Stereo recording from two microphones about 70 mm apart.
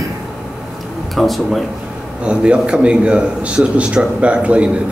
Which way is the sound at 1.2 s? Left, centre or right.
Centre.